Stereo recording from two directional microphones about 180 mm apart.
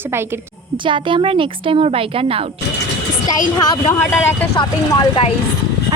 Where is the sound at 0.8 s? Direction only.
25° right (ahead or behind).